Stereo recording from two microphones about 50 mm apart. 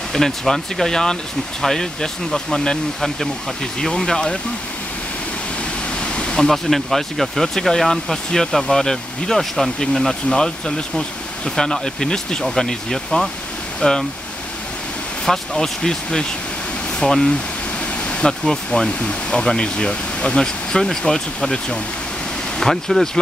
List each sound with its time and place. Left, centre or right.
0.1 s speech: centre
3.8 s speech: centre
6.1 s speech: centre
15.2 s speech: centre